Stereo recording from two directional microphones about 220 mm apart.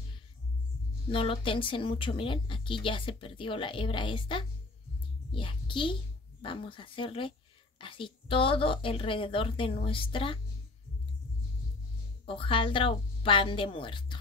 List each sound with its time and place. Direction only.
1.1 s a woman's voice: 25° left (ahead or behind)
12.3 s a woman's voice: 25° left (ahead or behind)